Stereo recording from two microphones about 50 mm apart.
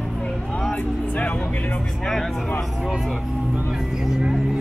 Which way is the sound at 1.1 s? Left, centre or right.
Left.